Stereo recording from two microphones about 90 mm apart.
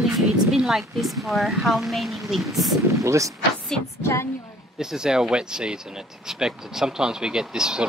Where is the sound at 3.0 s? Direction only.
35° right (ahead or behind).